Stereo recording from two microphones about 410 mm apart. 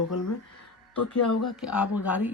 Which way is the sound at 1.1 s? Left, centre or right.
Left.